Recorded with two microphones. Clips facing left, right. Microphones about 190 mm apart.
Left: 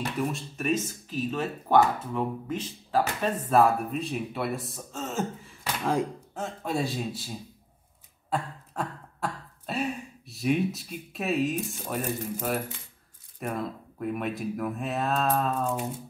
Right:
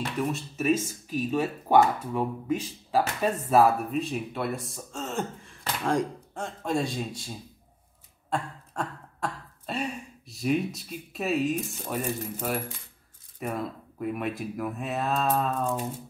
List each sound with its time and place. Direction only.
0.2 s speech: 5° right (ahead or behind)